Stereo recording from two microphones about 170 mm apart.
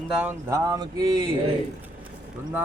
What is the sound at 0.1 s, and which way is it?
Speech, 10° right (ahead or behind).